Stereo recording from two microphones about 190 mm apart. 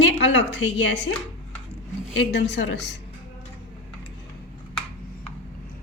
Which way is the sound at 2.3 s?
65° left (ahead or behind).